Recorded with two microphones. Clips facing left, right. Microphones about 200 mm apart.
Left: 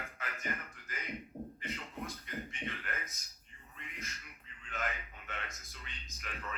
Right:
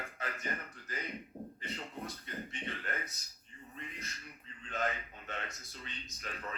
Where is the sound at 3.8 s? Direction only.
35° right (ahead or behind).